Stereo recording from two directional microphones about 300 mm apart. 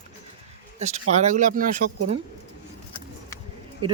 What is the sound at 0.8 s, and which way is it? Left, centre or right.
Speech, right.